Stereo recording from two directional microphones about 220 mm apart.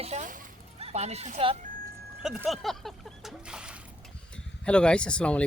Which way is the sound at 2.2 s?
Centre (ahead or behind).